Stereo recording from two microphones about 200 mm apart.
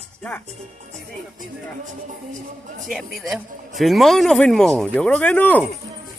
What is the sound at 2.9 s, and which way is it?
Speech, centre (ahead or behind).